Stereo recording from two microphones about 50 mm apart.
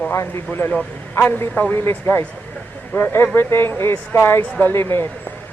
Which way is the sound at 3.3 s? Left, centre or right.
Left.